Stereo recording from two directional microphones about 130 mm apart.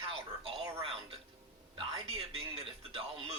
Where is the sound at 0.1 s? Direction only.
45° right (ahead or behind).